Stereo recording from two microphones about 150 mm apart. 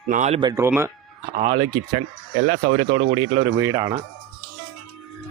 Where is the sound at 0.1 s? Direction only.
50° right (ahead or behind).